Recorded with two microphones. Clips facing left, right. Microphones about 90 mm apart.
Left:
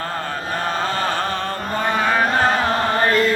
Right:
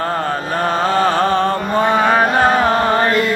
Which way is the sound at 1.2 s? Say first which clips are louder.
Right 9 dB; 35° right (ahead or behind).